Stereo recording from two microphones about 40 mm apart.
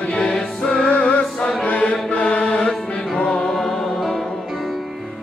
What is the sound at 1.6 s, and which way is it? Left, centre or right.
Chant, left.